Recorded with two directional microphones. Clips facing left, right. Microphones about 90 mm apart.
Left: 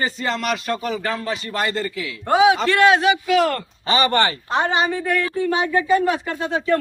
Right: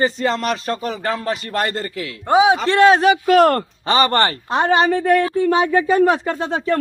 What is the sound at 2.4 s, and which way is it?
A man's voice, 30° right (ahead or behind).